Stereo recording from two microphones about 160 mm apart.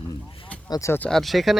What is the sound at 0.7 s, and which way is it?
Speech, 20° left (ahead or behind).